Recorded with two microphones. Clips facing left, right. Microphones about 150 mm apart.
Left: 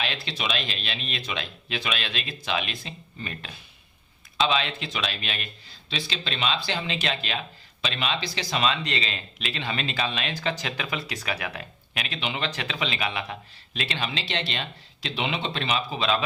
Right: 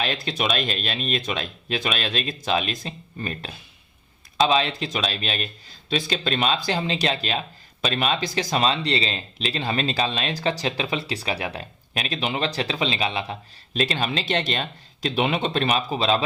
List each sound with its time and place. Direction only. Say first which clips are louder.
0.0 s speech: right 5 dB; 45° right (ahead or behind)
5.9 s speech: right 8 dB; 45° right (ahead or behind); by 13.3 s 30° right (ahead or behind)
13.7 s speech: right 6 dB; 40° right (ahead or behind)
16.0 s speech: right 3 dB; 30° right (ahead or behind)